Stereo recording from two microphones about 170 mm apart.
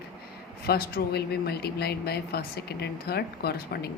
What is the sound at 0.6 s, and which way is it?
A woman's voice, 65° left (ahead or behind).